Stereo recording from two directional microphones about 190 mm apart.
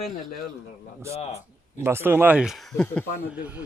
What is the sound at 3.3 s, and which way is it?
Speech, 10° right (ahead or behind).